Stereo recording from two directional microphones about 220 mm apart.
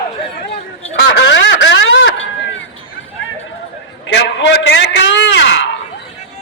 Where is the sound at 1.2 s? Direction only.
55° left (ahead or behind).